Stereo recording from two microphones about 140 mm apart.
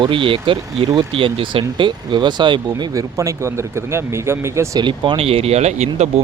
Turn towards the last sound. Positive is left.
turn(degrees=-55)  # may be behind; listen again after turning